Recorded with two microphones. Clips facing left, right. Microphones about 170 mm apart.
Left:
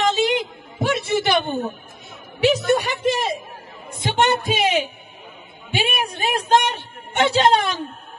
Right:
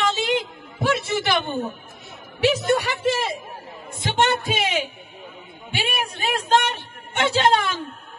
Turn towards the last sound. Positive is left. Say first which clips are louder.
# left 2 dB
turn(degrees=20)  # may be behind; listen again after turning